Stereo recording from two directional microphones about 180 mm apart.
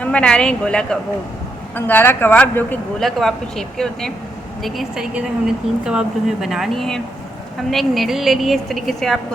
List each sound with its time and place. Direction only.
0.0 s speech: 5° left (ahead or behind)